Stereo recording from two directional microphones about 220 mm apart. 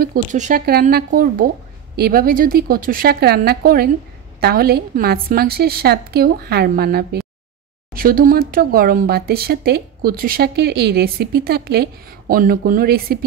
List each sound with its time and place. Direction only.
0.0 s speech: 35° right (ahead or behind)